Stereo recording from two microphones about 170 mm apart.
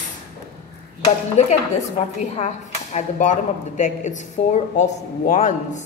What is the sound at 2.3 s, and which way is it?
Speech, 40° left (ahead or behind).